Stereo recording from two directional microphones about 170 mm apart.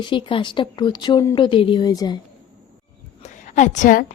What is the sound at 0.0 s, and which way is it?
Speech, 30° left (ahead or behind).